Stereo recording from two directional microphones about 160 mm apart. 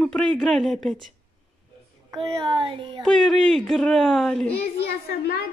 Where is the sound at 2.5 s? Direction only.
30° right (ahead or behind).